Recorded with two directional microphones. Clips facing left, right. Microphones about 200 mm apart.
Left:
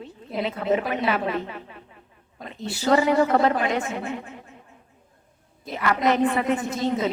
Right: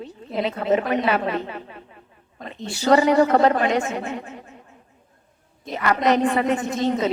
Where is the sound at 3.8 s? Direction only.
40° right (ahead or behind).